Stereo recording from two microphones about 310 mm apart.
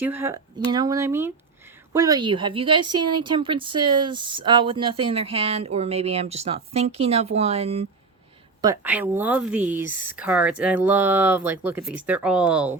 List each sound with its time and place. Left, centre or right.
0.0 s speech: centre
8.6 s speech: centre